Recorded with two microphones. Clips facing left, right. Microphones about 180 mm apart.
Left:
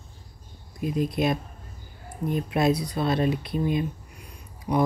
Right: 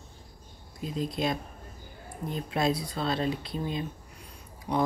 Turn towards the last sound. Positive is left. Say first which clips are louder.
# left 4 dB
turn(degrees=10)  # may be behind; listen again after turning